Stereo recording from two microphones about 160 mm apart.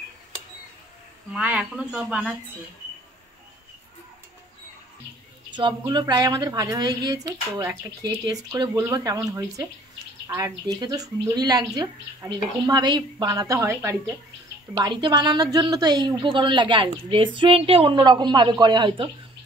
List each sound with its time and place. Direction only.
1.3 s speech: 5° right (ahead or behind)
5.5 s speech: 30° right (ahead or behind)